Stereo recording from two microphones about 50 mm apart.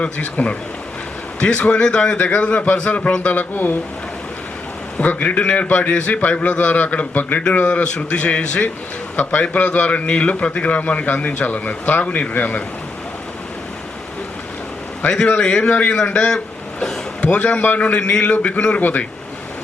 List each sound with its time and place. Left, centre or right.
0.0 s a man's voice: left
3.5 s a man's voice: left
4.9 s a man's voice: left
7.6 s a man's voice: left
15.2 s a man's voice: left
18.8 s a man's voice: left